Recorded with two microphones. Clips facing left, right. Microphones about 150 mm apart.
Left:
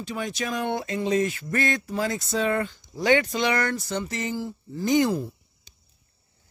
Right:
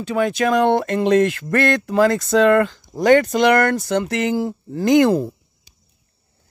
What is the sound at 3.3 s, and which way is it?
Speech, 70° right (ahead or behind).